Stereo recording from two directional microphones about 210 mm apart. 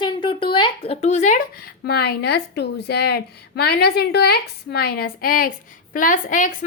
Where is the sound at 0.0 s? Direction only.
25° left (ahead or behind).